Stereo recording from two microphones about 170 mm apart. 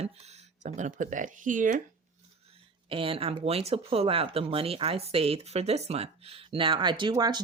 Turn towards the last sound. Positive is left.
turn(degrees=-25)  # may be behind; listen again after turning